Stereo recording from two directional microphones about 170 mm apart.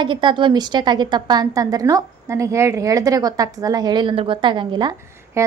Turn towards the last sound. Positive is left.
turn(degrees=-15)  # may be behind; listen again after turning